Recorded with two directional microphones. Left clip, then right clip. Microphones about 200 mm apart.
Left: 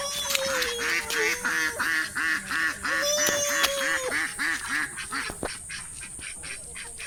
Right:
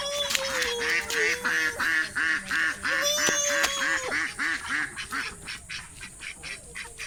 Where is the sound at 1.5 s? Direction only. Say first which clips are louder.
Right 1 dB; 50° left (ahead or behind).